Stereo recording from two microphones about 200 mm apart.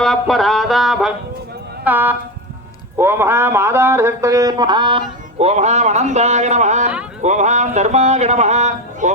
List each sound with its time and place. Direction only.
0.0 s music: centre (ahead or behind)
1.8 s a man's voice: 10° right (ahead or behind); by 9.1 s 35° right (ahead or behind)